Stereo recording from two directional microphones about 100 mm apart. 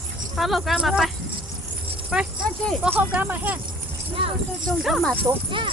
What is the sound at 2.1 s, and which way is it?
Speech, 5° right (ahead or behind).